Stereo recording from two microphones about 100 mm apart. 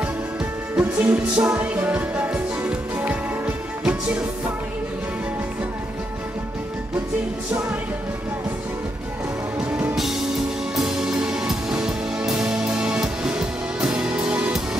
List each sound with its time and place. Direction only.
0.7 s music: 10° right (ahead or behind)
9.6 s music: 10° right (ahead or behind)